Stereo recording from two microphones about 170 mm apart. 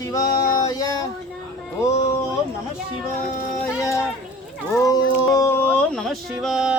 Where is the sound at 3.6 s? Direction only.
15° left (ahead or behind).